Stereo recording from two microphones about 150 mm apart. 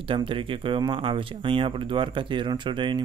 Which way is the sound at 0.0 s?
35° right (ahead or behind).